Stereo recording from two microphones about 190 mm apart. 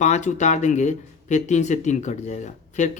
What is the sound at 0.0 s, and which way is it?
Speech, 40° left (ahead or behind).